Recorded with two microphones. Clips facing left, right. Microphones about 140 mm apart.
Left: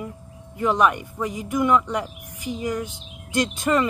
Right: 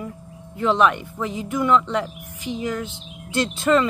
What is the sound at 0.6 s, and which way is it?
Speech, 10° left (ahead or behind).